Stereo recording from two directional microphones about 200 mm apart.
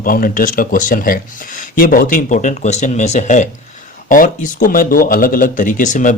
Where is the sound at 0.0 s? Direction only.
45° left (ahead or behind).